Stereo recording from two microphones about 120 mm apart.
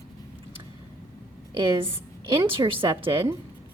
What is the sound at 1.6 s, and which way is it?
A woman's voice, 45° right (ahead or behind).